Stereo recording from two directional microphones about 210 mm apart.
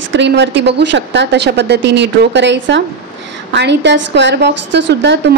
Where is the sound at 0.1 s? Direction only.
55° right (ahead or behind).